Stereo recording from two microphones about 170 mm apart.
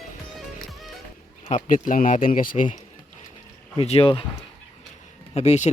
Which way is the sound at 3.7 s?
35° left (ahead or behind).